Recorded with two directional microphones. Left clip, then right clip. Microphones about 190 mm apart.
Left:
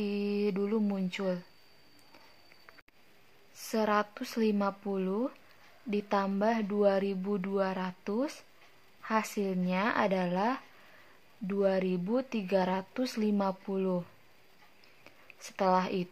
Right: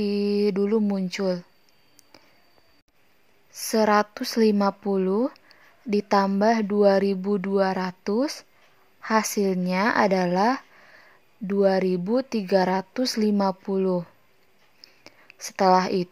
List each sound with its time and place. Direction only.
0.0 s mantra: 40° right (ahead or behind)
1.1 s speech: 40° right (ahead or behind)
3.5 s speech: 45° right (ahead or behind)
15.0 s speech: 40° right (ahead or behind)